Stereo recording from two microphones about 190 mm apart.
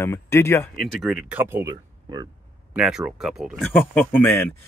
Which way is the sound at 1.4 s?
15° right (ahead or behind).